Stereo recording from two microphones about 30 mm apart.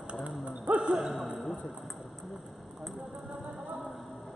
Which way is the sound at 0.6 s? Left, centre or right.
Right.